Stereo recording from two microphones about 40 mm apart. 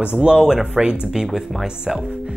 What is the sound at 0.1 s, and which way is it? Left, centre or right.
Speech, right.